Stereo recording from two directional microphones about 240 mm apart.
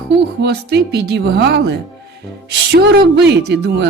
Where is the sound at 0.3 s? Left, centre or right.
Right.